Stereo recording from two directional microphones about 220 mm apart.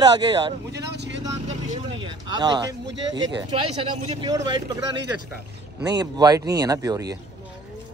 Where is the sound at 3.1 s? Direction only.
20° right (ahead or behind).